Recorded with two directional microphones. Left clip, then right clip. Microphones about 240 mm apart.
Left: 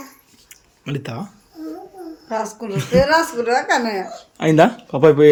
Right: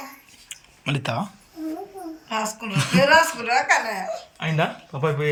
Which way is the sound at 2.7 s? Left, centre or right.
Centre.